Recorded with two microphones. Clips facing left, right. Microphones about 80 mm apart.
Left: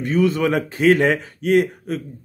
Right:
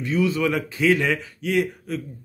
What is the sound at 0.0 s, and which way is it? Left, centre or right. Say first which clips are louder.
A man's voice: left 4 dB; left.